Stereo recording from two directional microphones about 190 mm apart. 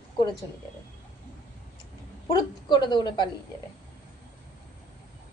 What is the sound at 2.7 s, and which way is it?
Speech, 25° left (ahead or behind).